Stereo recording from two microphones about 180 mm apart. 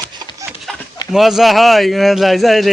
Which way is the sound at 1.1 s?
Centre (ahead or behind).